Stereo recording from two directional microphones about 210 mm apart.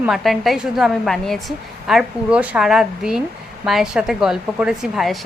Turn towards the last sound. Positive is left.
turn(degrees=0)  # may be behind; listen again after turning